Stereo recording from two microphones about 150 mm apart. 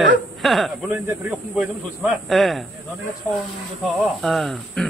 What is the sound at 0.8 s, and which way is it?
Speech, 15° right (ahead or behind).